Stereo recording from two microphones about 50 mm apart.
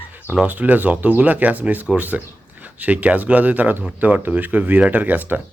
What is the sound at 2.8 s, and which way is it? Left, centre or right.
Speech, right.